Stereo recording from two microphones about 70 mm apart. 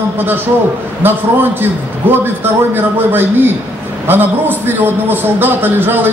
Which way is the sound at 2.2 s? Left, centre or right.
Right.